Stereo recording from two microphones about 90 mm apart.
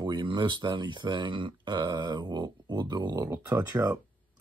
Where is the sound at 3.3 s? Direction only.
25° right (ahead or behind).